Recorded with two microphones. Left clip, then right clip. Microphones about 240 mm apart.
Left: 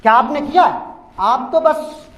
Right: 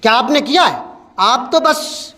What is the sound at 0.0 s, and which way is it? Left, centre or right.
A man's voice, right.